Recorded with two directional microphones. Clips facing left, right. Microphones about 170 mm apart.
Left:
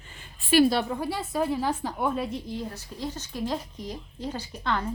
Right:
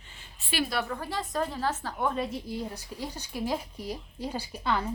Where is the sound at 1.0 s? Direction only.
10° left (ahead or behind).